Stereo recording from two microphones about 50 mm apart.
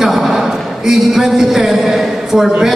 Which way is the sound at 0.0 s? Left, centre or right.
Centre.